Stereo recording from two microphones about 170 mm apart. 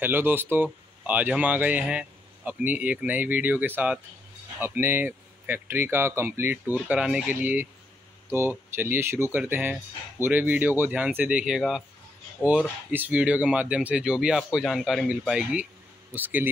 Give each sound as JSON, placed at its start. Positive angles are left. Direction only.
{"t": 0.0, "sound": "speech", "side_deg": -10}